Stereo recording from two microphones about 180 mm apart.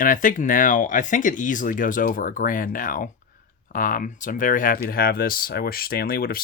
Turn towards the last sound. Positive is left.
turn(degrees=55)  # may be behind; listen again after turning